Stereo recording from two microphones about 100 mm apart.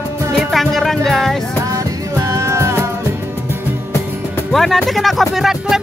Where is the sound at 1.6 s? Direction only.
35° right (ahead or behind).